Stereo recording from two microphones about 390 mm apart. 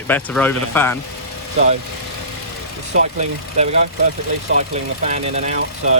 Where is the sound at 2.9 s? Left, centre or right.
Centre.